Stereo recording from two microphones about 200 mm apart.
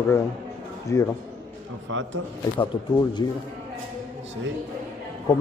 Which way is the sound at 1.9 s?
70° right (ahead or behind).